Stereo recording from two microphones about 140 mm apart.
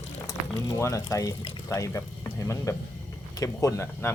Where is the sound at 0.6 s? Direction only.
25° left (ahead or behind).